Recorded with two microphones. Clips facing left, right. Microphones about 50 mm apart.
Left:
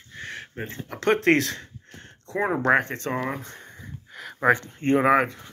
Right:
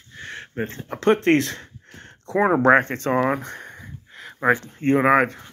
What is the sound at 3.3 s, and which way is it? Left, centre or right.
Speech, right.